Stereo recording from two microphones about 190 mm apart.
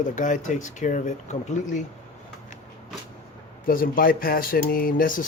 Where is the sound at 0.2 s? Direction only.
40° left (ahead or behind).